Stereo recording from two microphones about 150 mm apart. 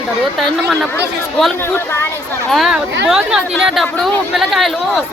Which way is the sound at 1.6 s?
15° left (ahead or behind).